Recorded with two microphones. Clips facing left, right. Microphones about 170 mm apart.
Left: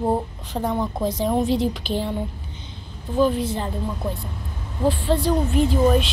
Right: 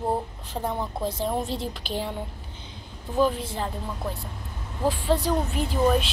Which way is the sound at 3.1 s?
Centre (ahead or behind).